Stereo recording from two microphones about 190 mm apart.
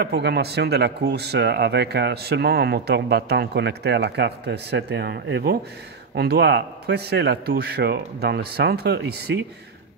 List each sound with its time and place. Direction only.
0.0 s speech: 60° right (ahead or behind)